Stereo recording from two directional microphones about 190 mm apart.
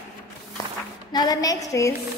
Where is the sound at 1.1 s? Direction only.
20° left (ahead or behind).